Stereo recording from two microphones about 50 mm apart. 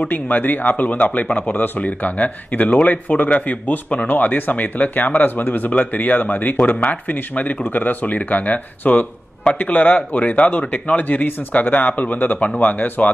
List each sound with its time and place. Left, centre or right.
0.0 s a man's voice: left